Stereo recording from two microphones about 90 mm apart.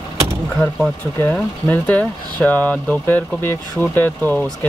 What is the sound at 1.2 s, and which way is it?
Speech, 20° left (ahead or behind).